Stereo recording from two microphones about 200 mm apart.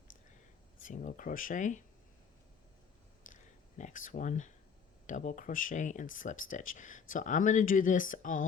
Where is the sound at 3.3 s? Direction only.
40° left (ahead or behind).